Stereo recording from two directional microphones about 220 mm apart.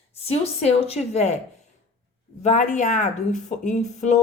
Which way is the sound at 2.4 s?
35° left (ahead or behind).